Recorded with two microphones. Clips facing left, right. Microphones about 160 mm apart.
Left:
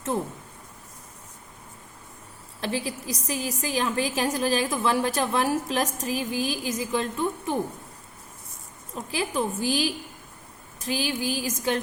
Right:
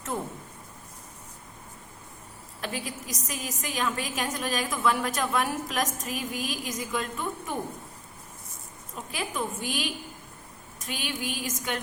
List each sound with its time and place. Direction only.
2.6 s a woman's voice: 30° left (ahead or behind)
9.0 s a woman's voice: 35° left (ahead or behind)